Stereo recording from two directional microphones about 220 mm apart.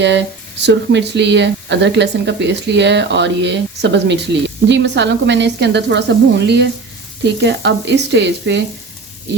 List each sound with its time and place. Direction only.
0.6 s speech: 50° right (ahead or behind)